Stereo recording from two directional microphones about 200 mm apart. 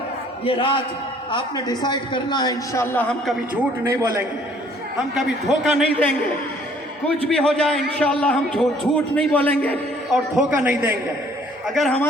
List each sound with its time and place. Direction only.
0.4 s a man's voice: 25° left (ahead or behind); by 3.3 s 5° left (ahead or behind)
3.5 s a man's voice: 10° right (ahead or behind)
5.1 s a man's voice: centre (ahead or behind)
7.3 s a man's voice: 5° left (ahead or behind)